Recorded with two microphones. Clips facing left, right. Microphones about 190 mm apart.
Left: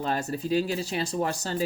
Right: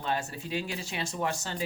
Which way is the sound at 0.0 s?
40° left (ahead or behind).